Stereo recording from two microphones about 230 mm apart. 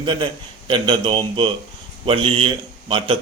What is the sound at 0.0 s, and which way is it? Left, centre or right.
A man's voice, right.